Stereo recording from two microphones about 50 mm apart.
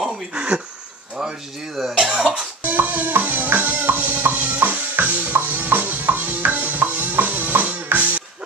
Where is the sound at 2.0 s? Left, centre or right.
Centre.